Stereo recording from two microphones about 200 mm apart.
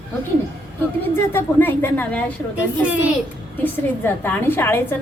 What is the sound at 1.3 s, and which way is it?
A woman's voice, 10° left (ahead or behind).